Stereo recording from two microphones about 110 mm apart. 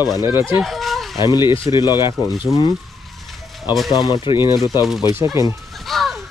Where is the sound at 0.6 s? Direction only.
Centre (ahead or behind).